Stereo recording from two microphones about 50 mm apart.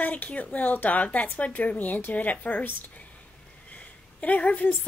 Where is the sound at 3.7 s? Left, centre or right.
Left.